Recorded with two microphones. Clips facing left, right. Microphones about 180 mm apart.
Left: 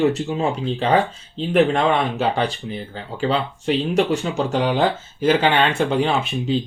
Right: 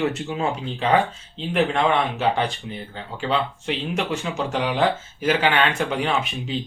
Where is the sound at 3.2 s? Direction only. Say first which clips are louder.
Left 3 dB; 35° left (ahead or behind).